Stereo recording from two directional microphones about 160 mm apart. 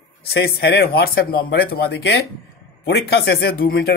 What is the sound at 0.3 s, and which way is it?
Speech, 85° left.